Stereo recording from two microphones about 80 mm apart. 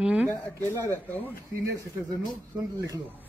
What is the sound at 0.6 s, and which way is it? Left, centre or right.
Speech, left.